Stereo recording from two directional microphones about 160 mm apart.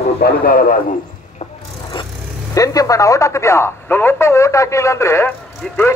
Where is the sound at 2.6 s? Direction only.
20° left (ahead or behind).